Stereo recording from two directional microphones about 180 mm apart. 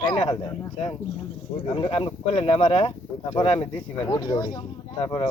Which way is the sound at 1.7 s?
30° left (ahead or behind).